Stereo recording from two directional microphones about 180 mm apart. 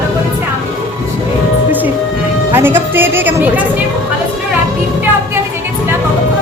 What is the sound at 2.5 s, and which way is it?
A woman's voice, 10° right (ahead or behind).